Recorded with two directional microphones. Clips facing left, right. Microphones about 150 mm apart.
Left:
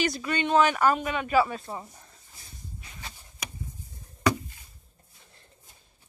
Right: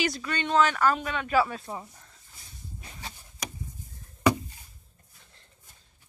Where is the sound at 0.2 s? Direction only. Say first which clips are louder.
Left 2 dB; 10° left (ahead or behind).